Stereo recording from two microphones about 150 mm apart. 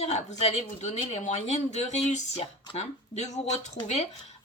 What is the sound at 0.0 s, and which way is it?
Speech, 45° left (ahead or behind).